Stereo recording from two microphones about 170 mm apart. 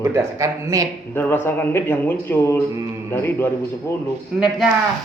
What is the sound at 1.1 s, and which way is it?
A man's voice, 15° left (ahead or behind).